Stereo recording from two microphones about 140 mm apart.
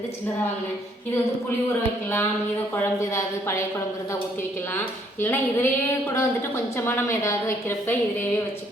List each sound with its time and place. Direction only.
2.7 s speech: 20° left (ahead or behind)
5.2 s a woman's voice: 15° left (ahead or behind)